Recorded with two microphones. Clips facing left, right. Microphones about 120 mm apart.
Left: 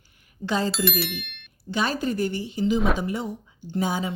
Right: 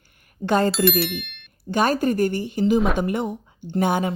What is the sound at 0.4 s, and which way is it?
Speech, 55° right (ahead or behind).